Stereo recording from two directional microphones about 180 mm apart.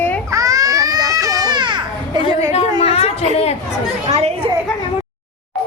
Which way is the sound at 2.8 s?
35° left (ahead or behind).